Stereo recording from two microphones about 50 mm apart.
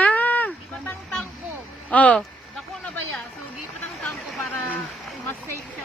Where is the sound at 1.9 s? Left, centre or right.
Left.